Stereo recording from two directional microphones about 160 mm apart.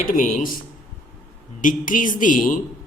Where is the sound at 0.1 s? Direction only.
55° left (ahead or behind).